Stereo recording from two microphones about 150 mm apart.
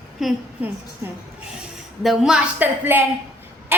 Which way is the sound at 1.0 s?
20° right (ahead or behind).